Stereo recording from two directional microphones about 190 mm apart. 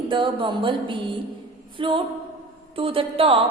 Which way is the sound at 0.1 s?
25° right (ahead or behind).